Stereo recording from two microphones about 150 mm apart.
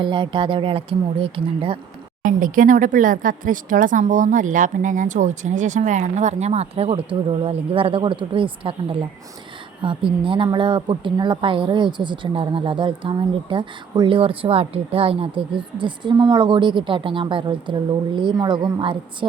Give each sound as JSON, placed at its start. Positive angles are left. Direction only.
{"t": 0.0, "sound": "a woman's voice", "side_deg": -35}
{"t": 2.2, "sound": "a woman's voice", "side_deg": -65}